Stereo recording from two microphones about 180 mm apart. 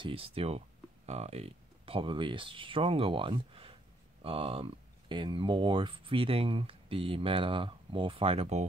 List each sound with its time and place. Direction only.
0.0 s speech: 30° right (ahead or behind)